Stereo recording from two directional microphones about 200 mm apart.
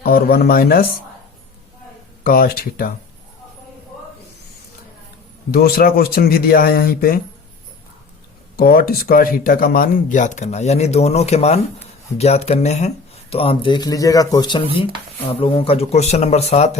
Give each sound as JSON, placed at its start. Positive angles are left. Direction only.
{"t": 0.0, "sound": "speech", "side_deg": 45}
{"t": 2.2, "sound": "speech", "side_deg": 45}
{"t": 5.5, "sound": "speech", "side_deg": 50}
{"t": 8.5, "sound": "speech", "side_deg": 45}